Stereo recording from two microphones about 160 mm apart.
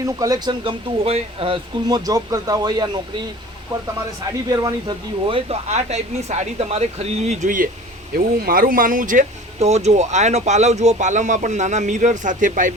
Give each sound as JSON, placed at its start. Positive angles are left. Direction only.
{"t": 0.0, "sound": "speech", "side_deg": -25}
{"t": 2.0, "sound": "speech", "side_deg": -20}
{"t": 4.3, "sound": "speech", "side_deg": -20}